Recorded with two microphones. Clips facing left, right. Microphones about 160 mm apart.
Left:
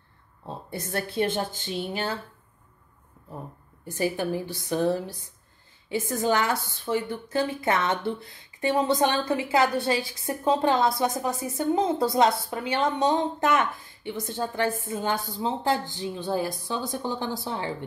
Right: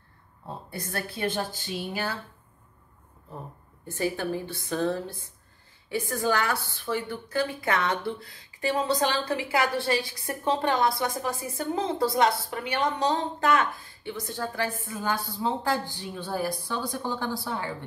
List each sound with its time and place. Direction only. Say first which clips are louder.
0.7 s a woman's voice: left 4 dB; 25° left (ahead or behind)
3.8 s a woman's voice: left 2 dB; 15° left (ahead or behind)